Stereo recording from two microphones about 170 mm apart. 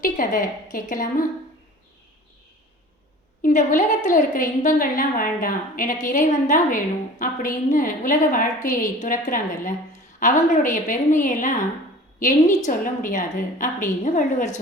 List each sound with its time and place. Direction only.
0.0 s a woman's voice: 50° left (ahead or behind)
3.4 s a woman's voice: 50° left (ahead or behind)